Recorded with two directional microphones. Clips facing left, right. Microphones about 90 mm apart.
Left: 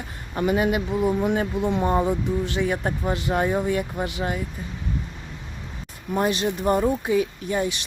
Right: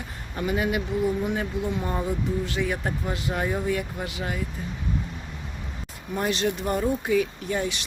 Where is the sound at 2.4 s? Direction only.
25° left (ahead or behind).